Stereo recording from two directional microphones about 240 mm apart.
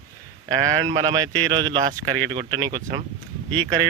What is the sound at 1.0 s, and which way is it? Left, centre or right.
Speech, centre.